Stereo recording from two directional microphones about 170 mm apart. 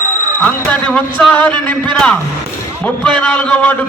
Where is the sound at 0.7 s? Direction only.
5° left (ahead or behind).